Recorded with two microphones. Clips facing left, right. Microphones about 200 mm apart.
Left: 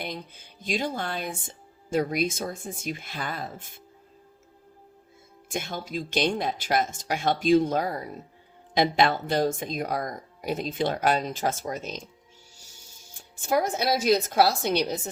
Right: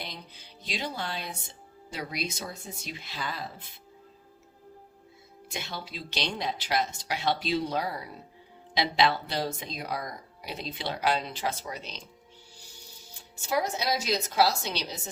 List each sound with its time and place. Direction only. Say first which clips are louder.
0.0 s speech: left 7 dB; 50° left (ahead or behind)
5.5 s speech: left 6 dB; 50° left (ahead or behind)
12.5 s music: right 3 dB; 45° left (ahead or behind)
13.4 s speech: left 4 dB; 50° left (ahead or behind)